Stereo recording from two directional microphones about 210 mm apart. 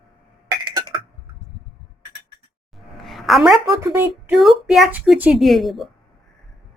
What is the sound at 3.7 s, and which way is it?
Speech, 15° right (ahead or behind).